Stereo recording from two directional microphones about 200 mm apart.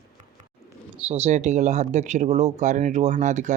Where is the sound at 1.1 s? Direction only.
30° right (ahead or behind).